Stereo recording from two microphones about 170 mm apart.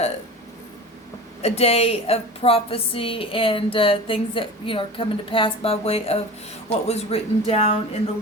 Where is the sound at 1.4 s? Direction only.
35° left (ahead or behind).